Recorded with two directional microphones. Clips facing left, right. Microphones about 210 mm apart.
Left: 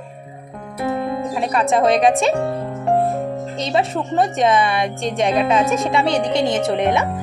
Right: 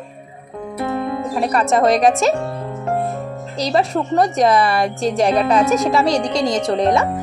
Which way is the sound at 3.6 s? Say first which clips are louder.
Right 3 dB; centre (ahead or behind).